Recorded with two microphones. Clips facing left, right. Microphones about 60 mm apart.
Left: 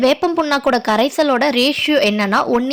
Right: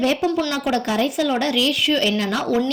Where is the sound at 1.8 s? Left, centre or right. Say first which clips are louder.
Left 5 dB; left.